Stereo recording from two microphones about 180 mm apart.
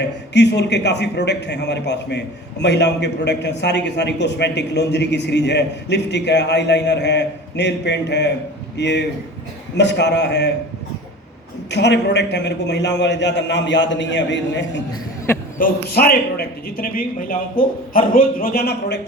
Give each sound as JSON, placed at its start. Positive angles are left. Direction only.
{"t": 0.3, "sound": "a man's voice", "side_deg": 70}
{"t": 11.7, "sound": "a man's voice", "side_deg": 70}
{"t": 15.5, "sound": "a man's voice", "side_deg": 55}